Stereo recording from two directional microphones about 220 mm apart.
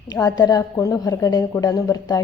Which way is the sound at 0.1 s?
15° left (ahead or behind).